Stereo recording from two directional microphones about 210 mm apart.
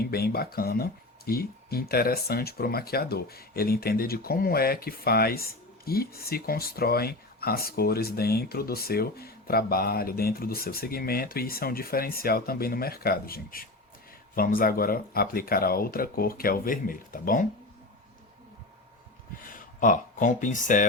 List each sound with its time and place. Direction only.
0.0 s speech: 45° left (ahead or behind)
19.4 s speech: 40° left (ahead or behind)